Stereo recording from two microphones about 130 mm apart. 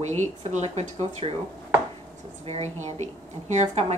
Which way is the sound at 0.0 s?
65° right (ahead or behind).